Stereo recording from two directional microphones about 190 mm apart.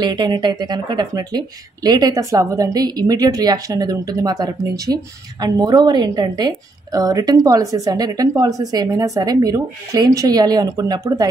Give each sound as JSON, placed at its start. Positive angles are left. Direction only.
{"t": 0.0, "sound": "speech", "side_deg": -25}